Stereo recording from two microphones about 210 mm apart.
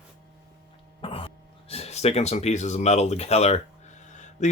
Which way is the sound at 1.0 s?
25° left (ahead or behind).